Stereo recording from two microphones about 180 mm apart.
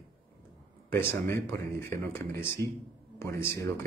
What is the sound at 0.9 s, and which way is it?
Speech, 15° left (ahead or behind).